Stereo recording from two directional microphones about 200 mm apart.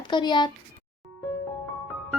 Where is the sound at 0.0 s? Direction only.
20° left (ahead or behind).